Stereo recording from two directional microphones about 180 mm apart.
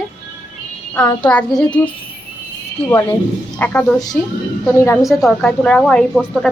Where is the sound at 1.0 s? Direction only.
20° left (ahead or behind).